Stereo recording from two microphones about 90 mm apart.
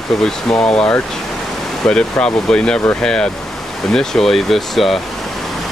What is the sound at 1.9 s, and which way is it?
Speech, 10° left (ahead or behind).